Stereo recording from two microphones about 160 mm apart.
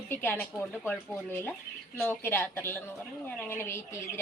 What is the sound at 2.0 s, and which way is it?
Speech, 15° left (ahead or behind).